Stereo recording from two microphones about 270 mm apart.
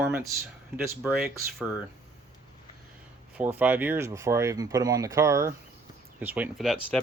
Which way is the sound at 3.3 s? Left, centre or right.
Centre.